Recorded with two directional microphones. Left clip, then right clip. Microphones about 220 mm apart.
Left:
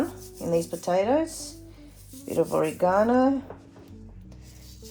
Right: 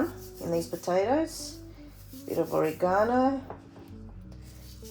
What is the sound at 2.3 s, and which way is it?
Speech, 35° left (ahead or behind).